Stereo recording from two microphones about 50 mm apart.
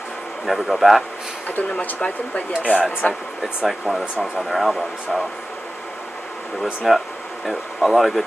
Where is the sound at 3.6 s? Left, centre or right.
Centre.